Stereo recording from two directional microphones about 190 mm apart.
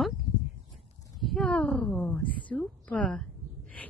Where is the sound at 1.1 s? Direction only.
Centre (ahead or behind).